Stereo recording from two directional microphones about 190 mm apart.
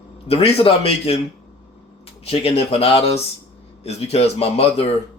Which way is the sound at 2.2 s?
35° left (ahead or behind).